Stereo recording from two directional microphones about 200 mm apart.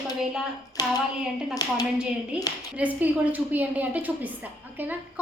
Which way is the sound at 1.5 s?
20° left (ahead or behind).